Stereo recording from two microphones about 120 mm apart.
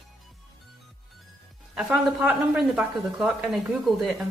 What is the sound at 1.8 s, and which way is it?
Speech, 15° right (ahead or behind).